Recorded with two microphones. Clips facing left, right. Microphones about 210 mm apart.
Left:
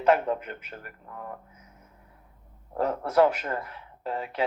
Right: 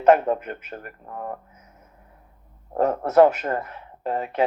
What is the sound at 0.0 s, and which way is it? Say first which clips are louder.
Speech: right 6 dB; 45° right (ahead or behind).